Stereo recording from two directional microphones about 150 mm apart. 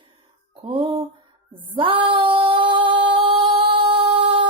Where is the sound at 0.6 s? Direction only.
35° right (ahead or behind).